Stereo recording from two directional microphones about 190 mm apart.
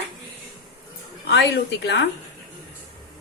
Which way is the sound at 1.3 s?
60° left (ahead or behind).